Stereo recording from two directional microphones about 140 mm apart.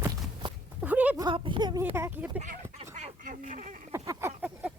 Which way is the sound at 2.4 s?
55° right (ahead or behind).